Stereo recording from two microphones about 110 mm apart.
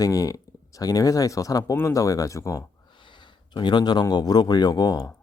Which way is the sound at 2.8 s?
45° left (ahead or behind).